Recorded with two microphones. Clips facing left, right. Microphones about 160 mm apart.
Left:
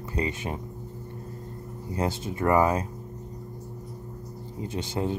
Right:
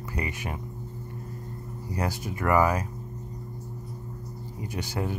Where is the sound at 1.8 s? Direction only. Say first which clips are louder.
Left 2 dB; 25° left (ahead or behind).